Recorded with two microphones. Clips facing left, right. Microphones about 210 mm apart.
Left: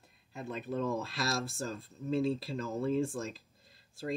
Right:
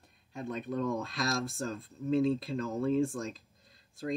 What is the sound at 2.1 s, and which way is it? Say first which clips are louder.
Speech: right 3 dB; centre (ahead or behind).